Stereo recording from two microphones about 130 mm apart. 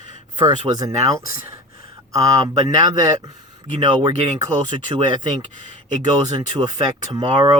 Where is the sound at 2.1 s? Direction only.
25° right (ahead or behind).